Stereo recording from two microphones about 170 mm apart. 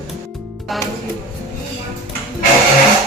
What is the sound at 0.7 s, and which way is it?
Music, centre (ahead or behind).